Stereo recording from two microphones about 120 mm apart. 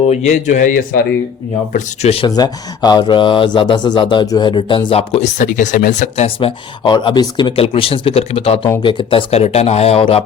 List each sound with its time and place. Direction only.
0.1 s a man's voice: 80° left
1.7 s speech: 60° left (ahead or behind)
2.2 s speech: 35° left (ahead or behind); by 6.2 s 90° left
6.2 s speech: 45° left (ahead or behind)
7.6 s speech: 55° left (ahead or behind)
8.8 s speech: 45° left (ahead or behind)
9.3 s speech: 60° left (ahead or behind)